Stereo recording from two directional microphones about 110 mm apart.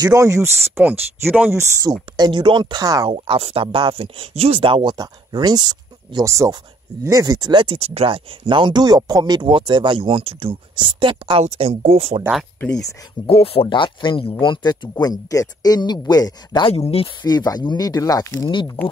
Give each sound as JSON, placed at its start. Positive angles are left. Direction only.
{"t": 0.0, "sound": "speech", "side_deg": -30}
{"t": 1.5, "sound": "speech", "side_deg": -25}
{"t": 2.1, "sound": "speech", "side_deg": -45}
{"t": 3.1, "sound": "speech", "side_deg": -60}
{"t": 4.9, "sound": "speech", "side_deg": -35}
{"t": 6.2, "sound": "speech", "side_deg": -30}
{"t": 11.4, "sound": "speech", "side_deg": -60}
{"t": 13.3, "sound": "speech", "side_deg": 60}
{"t": 16.6, "sound": "speech", "side_deg": 60}
{"t": 17.2, "sound": "speech", "side_deg": 40}
{"t": 18.8, "sound": "speech", "side_deg": 15}